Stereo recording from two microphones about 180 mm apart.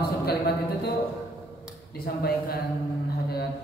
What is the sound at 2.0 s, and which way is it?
Speech, 60° left (ahead or behind).